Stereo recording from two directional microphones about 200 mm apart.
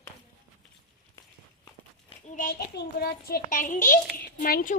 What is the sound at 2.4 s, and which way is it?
A child's voice, 50° left (ahead or behind).